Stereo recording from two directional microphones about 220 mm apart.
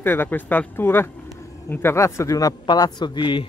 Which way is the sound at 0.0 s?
10° left (ahead or behind).